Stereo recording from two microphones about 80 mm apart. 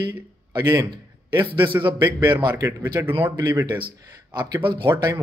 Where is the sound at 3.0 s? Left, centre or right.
Right.